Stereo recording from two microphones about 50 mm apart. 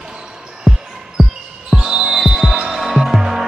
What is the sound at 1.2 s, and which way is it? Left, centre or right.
Basketball bounce, centre.